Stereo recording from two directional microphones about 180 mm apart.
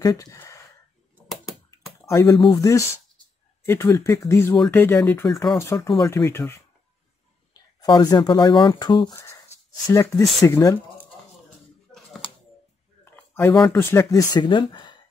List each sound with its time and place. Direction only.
0.0 s speech: 20° left (ahead or behind)
1.1 s a sound: centre (ahead or behind)
2.0 s speech: 15° left (ahead or behind)
7.8 s speech: 25° left (ahead or behind)
13.0 s a sound: 10° left (ahead or behind)
13.6 s speech: 10° left (ahead or behind); by 15.0 s 25° left (ahead or behind)